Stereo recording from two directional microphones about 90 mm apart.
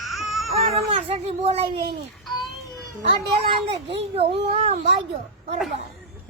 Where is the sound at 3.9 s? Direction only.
90° right.